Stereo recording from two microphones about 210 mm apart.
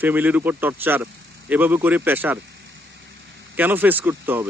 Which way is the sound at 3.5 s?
10° right (ahead or behind).